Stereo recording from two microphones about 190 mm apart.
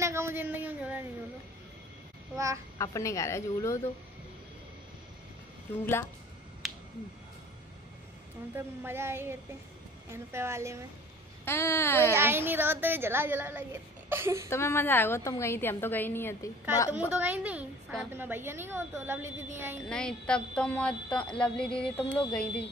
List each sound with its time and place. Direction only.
0.0 s a sound: 15° right (ahead or behind)
2.3 s a child's voice: 15° right (ahead or behind)
2.8 s a woman's voice: 15° left (ahead or behind)
5.7 s a woman's voice: 10° left (ahead or behind)
6.6 s a sound: centre (ahead or behind)
8.5 s a woman's voice: 10° right (ahead or behind)
11.4 s a woman's voice: 10° left (ahead or behind)
12.2 s a woman's voice: 10° right (ahead or behind)
14.5 s a woman's voice: 15° left (ahead or behind)
16.9 s a woman's voice: 10° right (ahead or behind)
19.9 s speech: 5° left (ahead or behind)